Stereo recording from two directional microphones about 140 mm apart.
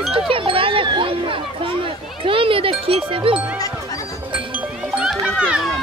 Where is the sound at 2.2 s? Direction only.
40° right (ahead or behind).